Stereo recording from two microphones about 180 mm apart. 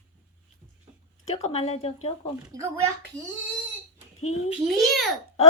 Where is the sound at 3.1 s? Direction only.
5° left (ahead or behind).